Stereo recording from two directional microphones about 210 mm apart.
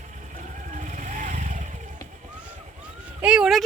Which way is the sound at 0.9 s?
35° right (ahead or behind).